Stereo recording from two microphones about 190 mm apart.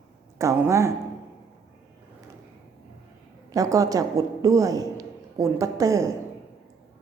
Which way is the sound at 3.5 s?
15° right (ahead or behind).